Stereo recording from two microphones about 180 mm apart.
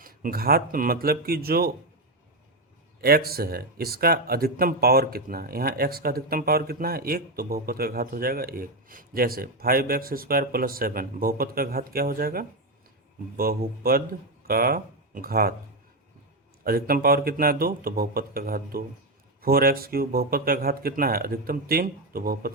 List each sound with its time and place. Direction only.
0.0 s speech: 55° right (ahead or behind)
3.0 s speech: 60° right (ahead or behind)
16.6 s speech: 55° right (ahead or behind)